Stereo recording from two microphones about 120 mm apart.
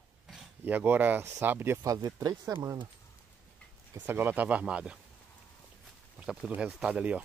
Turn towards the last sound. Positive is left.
turn(degrees=-10)  # may be behind; listen again after turning